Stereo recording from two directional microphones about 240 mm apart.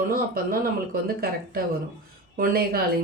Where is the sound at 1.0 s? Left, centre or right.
Right.